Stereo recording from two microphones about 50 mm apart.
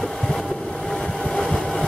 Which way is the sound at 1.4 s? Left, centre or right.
Centre.